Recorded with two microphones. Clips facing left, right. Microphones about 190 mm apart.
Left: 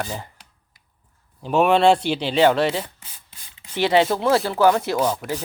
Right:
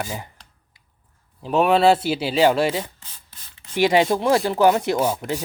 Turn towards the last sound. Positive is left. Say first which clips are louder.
# right 1 dB
turn(degrees=-10)  # may be behind; listen again after turning